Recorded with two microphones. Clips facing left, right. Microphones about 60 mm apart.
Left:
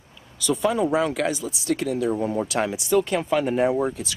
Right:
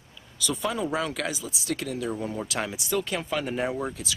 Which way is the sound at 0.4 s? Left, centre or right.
Centre.